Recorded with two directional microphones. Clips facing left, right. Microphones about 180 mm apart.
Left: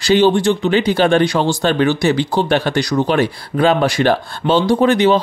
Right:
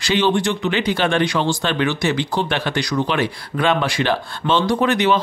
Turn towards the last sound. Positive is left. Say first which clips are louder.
# left 5 dB
turn(degrees=30)  # may be behind; listen again after turning